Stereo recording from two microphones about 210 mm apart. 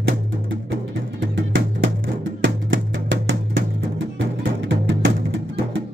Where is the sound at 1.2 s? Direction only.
60° right (ahead or behind).